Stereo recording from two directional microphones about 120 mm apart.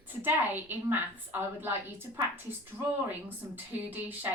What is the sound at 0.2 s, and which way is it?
A woman's voice, 15° right (ahead or behind).